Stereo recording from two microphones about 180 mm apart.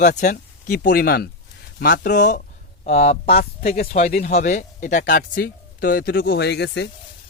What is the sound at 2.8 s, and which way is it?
Speech, 40° left (ahead or behind).